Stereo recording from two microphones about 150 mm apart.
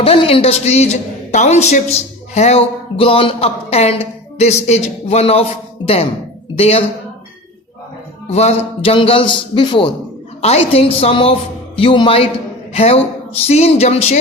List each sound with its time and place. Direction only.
0.0 s a man's voice: 40° left (ahead or behind)
8.3 s a man's voice: 45° left (ahead or behind)
10.4 s a man's voice: 45° left (ahead or behind)